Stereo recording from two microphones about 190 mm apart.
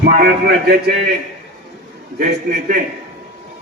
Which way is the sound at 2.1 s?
45° right (ahead or behind).